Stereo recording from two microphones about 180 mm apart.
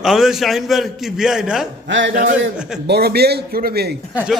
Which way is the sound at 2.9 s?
60° right (ahead or behind).